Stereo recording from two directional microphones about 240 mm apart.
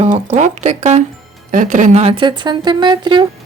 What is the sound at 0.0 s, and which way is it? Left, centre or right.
A woman's voice, right.